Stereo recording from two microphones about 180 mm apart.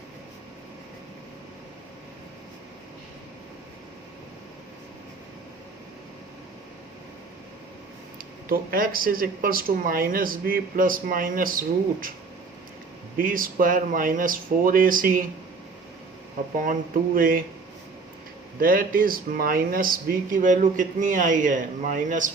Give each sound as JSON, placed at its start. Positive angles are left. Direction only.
{"t": 8.4, "sound": "speech", "side_deg": -50}
{"t": 13.1, "sound": "speech", "side_deg": -50}
{"t": 16.6, "sound": "speech", "side_deg": -50}
{"t": 18.6, "sound": "speech", "side_deg": -50}